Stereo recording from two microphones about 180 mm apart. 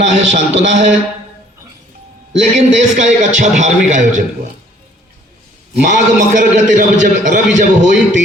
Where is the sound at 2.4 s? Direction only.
40° right (ahead or behind).